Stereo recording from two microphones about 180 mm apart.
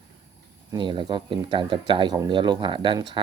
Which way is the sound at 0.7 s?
25° right (ahead or behind).